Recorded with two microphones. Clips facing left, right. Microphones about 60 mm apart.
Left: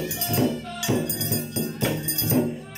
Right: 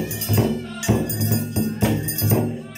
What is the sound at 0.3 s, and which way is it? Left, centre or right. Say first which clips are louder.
Music: right 2 dB; right.